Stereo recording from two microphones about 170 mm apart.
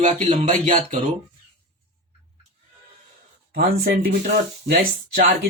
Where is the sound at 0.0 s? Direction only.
40° right (ahead or behind).